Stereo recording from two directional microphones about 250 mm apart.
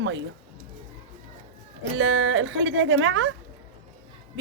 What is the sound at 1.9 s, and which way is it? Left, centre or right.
A woman's voice, right.